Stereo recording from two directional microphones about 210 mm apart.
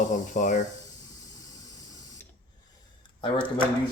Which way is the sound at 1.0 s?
15° left (ahead or behind).